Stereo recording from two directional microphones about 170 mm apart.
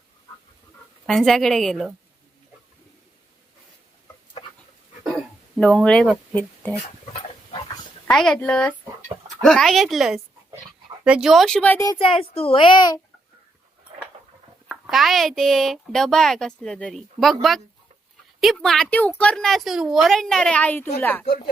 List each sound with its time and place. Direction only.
1.0 s speech: centre (ahead or behind)
5.5 s speech: 5° left (ahead or behind)
8.0 s speech: 5° left (ahead or behind)
11.9 s a child's voice: 35° left (ahead or behind)
14.7 s speech: centre (ahead or behind)
21.2 s speech: 55° left (ahead or behind)